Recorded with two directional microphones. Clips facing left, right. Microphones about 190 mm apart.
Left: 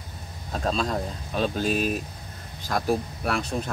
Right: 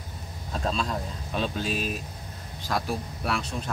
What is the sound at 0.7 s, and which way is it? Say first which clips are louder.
Speech: left 3 dB; 40° left (ahead or behind).